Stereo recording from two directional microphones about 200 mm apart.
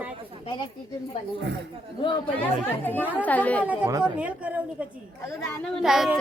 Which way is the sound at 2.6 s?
10° left (ahead or behind).